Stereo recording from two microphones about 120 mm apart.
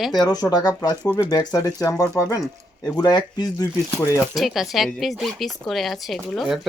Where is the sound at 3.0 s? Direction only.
35° left (ahead or behind).